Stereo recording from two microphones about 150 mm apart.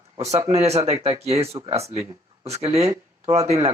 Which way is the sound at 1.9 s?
20° right (ahead or behind).